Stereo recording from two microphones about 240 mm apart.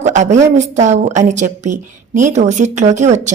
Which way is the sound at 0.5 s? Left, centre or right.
Right.